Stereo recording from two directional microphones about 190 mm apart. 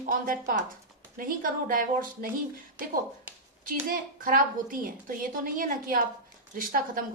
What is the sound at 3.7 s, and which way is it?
A woman's voice, 45° right (ahead or behind).